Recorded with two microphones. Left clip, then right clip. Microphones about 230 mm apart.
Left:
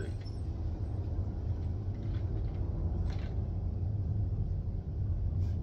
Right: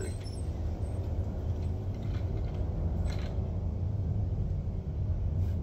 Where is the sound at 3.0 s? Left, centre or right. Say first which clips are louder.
Right 4 dB; right.